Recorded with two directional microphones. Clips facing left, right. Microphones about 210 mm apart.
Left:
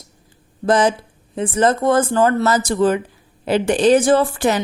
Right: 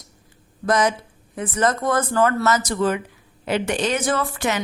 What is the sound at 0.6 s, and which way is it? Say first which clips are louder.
A woman's voice: left 4 dB; 30° left (ahead or behind).